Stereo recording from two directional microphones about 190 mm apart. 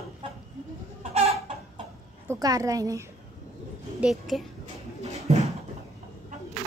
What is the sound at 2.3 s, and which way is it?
Speech, 20° right (ahead or behind).